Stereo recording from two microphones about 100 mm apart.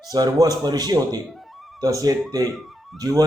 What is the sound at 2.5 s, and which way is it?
Music, centre (ahead or behind).